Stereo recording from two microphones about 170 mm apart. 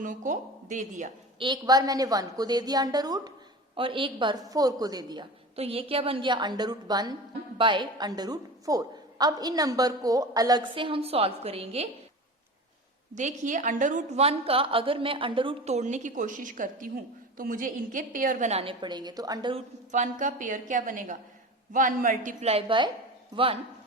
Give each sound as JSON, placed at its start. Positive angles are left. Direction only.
{"t": 0.0, "sound": "a woman's voice", "side_deg": -50}
{"t": 1.4, "sound": "a woman's voice", "side_deg": -25}
{"t": 5.5, "sound": "a woman's voice", "side_deg": -35}
{"t": 13.1, "sound": "a woman's voice", "side_deg": -45}
{"t": 19.9, "sound": "a woman's voice", "side_deg": -45}